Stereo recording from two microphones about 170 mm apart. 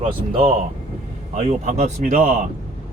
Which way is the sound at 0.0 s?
35° right (ahead or behind).